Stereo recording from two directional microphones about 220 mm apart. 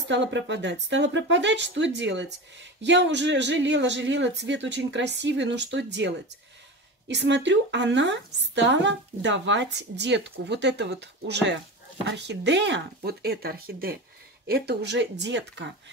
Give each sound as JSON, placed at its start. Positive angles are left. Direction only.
{"t": 0.1, "sound": "speech", "side_deg": -55}